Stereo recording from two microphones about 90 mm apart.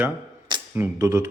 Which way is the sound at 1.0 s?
30° right (ahead or behind).